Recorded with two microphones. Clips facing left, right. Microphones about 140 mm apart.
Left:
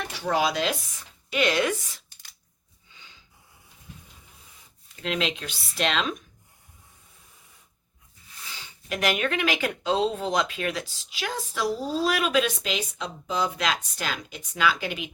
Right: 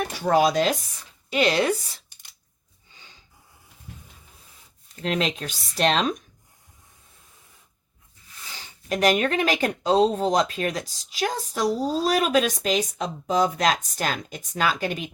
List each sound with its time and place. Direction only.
0.0 s stir: 50° right (ahead or behind)
1.3 s speech: 30° right (ahead or behind)
5.0 s speech: 40° right (ahead or behind)
8.5 s speech: 35° right (ahead or behind)